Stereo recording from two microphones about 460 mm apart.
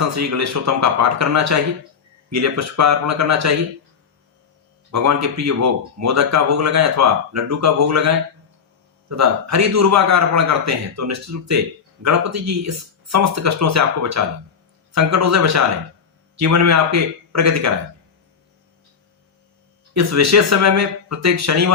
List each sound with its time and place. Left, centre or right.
0.0 s speech: right
4.9 s speech: right
19.9 s speech: right